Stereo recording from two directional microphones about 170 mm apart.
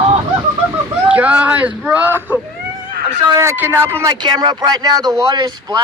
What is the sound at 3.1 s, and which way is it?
Speech, 20° right (ahead or behind).